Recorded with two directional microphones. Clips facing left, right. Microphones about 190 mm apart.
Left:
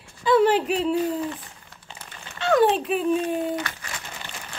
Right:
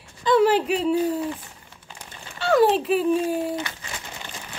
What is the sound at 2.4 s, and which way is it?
Speech, centre (ahead or behind).